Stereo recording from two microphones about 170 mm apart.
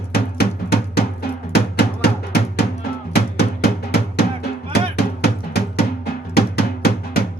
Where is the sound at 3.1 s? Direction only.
75° left (ahead or behind).